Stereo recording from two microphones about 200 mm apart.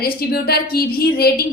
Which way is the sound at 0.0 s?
50° left (ahead or behind).